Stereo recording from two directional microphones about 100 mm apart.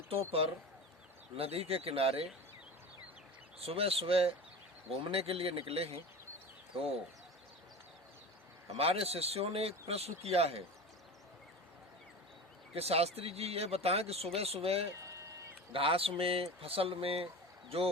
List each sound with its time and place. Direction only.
0.1 s speech: 75° right (ahead or behind)
3.6 s speech: 80° right
8.6 s speech: 90° right
12.7 s speech: 90° right
14.9 s a sound: 30° right (ahead or behind)
15.7 s speech: 70° right (ahead or behind)